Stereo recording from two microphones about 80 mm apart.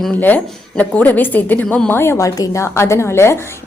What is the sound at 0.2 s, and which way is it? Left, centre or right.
A woman's voice, left.